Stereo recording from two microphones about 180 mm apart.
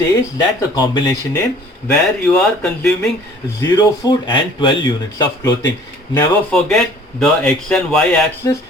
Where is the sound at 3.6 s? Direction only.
20° left (ahead or behind).